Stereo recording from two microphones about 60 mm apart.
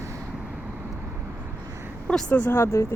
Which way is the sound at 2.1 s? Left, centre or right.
Centre.